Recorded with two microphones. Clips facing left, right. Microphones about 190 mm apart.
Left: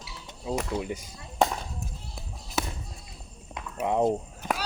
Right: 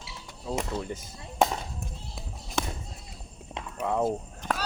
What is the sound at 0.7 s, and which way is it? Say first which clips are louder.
Speech: left 2 dB; 10° left (ahead or behind).